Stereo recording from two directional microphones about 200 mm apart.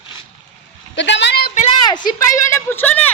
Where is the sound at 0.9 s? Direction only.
65° left (ahead or behind); by 1.7 s 45° left (ahead or behind).